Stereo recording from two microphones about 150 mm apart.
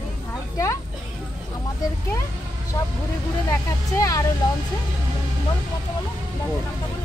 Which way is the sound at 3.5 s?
20° left (ahead or behind).